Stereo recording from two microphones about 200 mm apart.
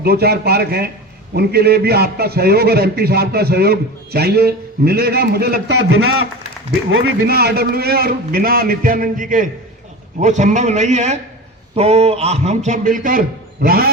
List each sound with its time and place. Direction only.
0.0 s a man's voice: 50° right (ahead or behind)
7.3 s a man's voice: 50° right (ahead or behind)